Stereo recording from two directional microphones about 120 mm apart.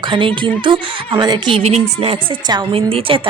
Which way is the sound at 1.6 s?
60° right (ahead or behind).